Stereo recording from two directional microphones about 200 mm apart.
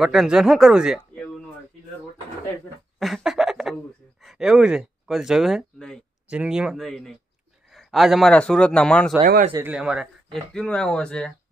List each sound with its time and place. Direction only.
0.0 s speech: centre (ahead or behind)
3.0 s a sound: centre (ahead or behind)
4.2 s speech: centre (ahead or behind)
9.2 s speech: 40° right (ahead or behind)
9.5 s speech: 10° right (ahead or behind)